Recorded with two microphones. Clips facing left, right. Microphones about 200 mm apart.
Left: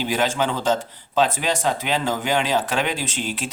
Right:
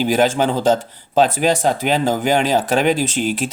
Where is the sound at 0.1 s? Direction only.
40° right (ahead or behind).